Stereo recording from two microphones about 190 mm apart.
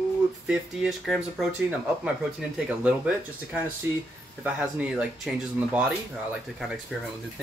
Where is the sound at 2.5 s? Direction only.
5° right (ahead or behind).